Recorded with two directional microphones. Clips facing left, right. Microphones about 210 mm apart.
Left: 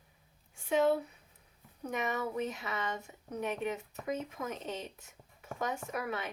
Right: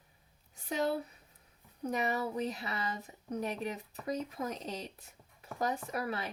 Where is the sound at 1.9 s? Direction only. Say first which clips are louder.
Right 1 dB; 35° right (ahead or behind).